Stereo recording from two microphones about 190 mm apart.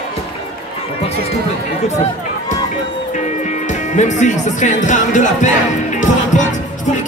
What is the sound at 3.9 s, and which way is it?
Speech, 40° left (ahead or behind).